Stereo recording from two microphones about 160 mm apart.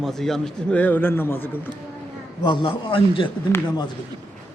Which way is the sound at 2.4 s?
30° left (ahead or behind).